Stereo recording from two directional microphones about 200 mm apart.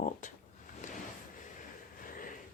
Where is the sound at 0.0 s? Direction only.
40° left (ahead or behind).